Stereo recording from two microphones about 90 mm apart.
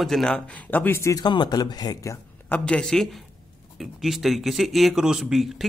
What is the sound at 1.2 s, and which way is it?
Speech, 55° left (ahead or behind).